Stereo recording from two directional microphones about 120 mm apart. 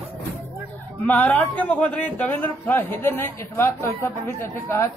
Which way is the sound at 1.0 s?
15° left (ahead or behind).